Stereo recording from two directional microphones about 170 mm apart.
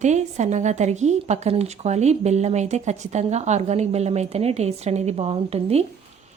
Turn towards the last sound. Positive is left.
turn(degrees=-35)  # may be behind; listen again after turning